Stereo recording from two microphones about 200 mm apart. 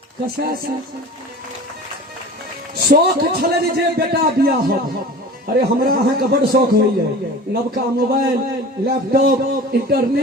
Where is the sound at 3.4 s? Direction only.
50° right (ahead or behind).